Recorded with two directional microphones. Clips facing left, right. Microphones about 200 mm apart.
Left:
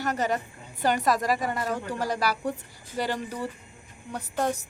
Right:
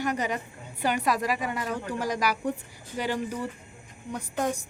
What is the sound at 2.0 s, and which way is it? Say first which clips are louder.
Speech: right 1 dB; 10° right (ahead or behind).